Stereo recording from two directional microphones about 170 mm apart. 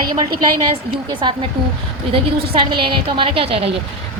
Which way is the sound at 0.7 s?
30° right (ahead or behind).